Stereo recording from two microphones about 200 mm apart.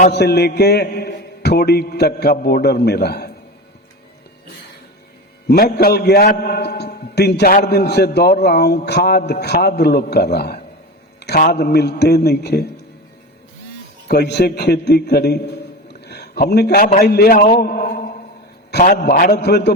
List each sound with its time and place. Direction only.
0.1 s a man's voice: 55° left (ahead or behind)
5.5 s a man's voice: 50° left (ahead or behind)
14.1 s a man's voice: 55° left (ahead or behind)
17.6 s a sound: 45° left (ahead or behind)
18.7 s a man's voice: 45° left (ahead or behind)